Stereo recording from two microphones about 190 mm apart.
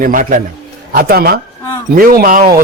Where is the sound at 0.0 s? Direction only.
45° right (ahead or behind).